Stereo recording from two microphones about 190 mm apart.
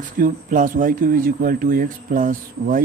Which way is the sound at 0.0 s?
45° right (ahead or behind).